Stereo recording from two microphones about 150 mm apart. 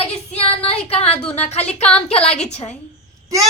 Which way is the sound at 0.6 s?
40° left (ahead or behind).